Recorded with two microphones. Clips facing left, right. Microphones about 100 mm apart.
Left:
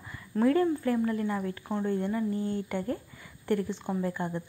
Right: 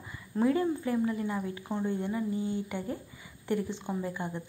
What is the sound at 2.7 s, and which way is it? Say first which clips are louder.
Speech: left 4 dB; 15° right (ahead or behind).